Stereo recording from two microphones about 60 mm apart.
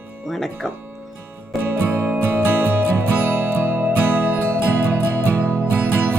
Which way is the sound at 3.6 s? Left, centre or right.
Right.